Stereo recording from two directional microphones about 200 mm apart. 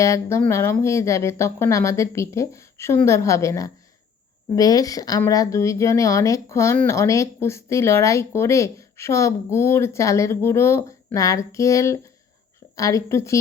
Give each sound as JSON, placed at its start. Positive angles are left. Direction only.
{"t": 0.0, "sound": "a woman's voice", "side_deg": 15}